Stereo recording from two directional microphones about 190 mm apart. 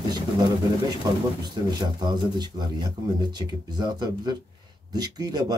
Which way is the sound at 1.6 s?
20° right (ahead or behind).